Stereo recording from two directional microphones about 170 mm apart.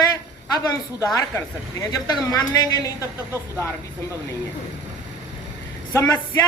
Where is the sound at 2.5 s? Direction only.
20° left (ahead or behind).